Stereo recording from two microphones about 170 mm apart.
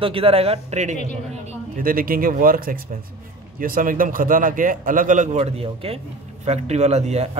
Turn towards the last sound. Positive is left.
turn(degrees=-40)  # may be behind; listen again after turning